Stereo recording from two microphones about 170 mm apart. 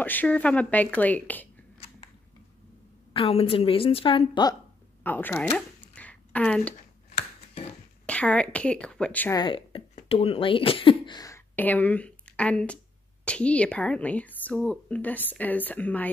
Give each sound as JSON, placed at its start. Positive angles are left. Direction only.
{"t": 0.0, "sound": "speech", "side_deg": 10}
{"t": 3.1, "sound": "a woman's voice", "side_deg": 35}
{"t": 5.0, "sound": "a sound", "side_deg": 10}
{"t": 7.2, "sound": "finger snapping", "side_deg": 35}
{"t": 8.1, "sound": "speech", "side_deg": 5}
{"t": 9.3, "sound": "speech", "side_deg": 30}